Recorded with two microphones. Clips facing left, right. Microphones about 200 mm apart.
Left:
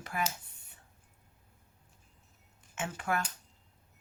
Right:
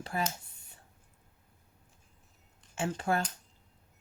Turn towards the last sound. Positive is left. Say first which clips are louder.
# right 3 dB
turn(degrees=-30)  # may be behind; listen again after turning